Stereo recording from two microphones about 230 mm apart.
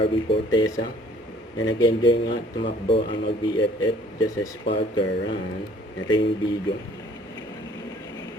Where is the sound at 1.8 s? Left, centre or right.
Left.